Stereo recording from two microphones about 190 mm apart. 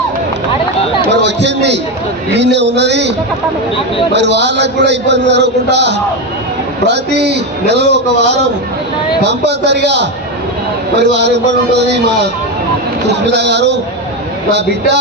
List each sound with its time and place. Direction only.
1.1 s a man's voice: 65° right (ahead or behind)
13.1 s a man's voice: 65° right (ahead or behind)